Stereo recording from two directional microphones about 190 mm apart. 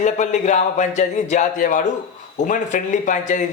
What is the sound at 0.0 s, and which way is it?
Speech, 40° left (ahead or behind).